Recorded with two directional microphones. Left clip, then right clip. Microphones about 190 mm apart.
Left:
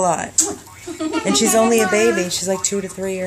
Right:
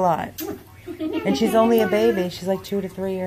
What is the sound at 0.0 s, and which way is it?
Speech, 10° left (ahead or behind).